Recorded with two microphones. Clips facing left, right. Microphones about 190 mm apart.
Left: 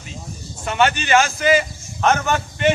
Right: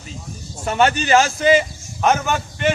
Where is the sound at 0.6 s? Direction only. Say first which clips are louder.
Right 2 dB; 40° right (ahead or behind).